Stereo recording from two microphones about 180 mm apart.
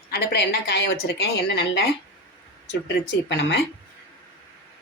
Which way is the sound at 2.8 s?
75° left (ahead or behind).